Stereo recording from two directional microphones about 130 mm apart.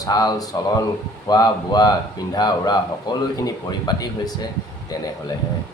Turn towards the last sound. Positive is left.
turn(degrees=30)  # may be behind; listen again after turning